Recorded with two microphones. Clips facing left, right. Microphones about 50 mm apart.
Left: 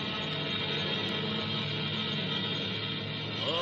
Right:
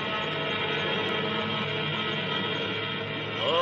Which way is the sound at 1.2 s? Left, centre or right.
Right.